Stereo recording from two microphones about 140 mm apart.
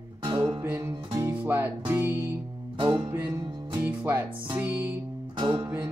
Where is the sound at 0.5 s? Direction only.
20° right (ahead or behind).